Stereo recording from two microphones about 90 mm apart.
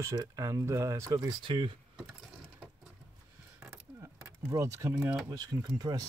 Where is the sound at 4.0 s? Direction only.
35° right (ahead or behind).